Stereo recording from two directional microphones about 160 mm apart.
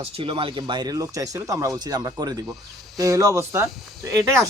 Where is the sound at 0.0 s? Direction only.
35° right (ahead or behind).